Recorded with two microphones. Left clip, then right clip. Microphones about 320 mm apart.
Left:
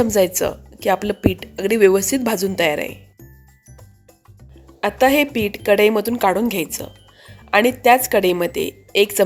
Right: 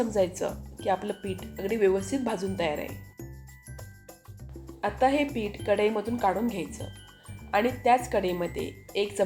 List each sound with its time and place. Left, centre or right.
0.0 s speech: left
4.8 s speech: left